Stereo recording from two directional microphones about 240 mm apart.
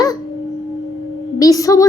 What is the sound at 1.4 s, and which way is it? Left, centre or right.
Speech, centre.